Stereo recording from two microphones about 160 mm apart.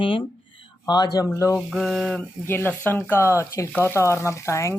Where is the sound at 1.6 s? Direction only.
Centre (ahead or behind).